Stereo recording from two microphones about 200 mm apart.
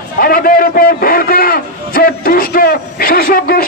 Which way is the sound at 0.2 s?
45° left (ahead or behind).